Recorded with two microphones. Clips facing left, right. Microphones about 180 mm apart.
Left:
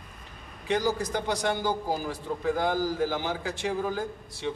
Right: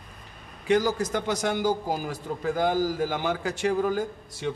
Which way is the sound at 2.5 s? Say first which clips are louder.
Right 5 dB; 45° right (ahead or behind).